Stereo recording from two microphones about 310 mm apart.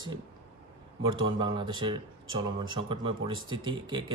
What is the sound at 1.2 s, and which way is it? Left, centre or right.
Speech, centre.